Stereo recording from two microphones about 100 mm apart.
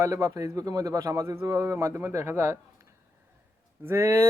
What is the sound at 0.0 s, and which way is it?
Speech, 30° right (ahead or behind).